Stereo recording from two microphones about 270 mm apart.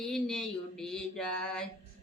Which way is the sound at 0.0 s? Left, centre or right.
Centre.